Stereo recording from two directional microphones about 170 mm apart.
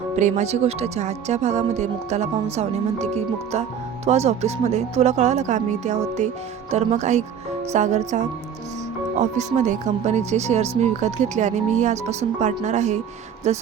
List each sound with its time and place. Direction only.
0.2 s speech: 45° right (ahead or behind)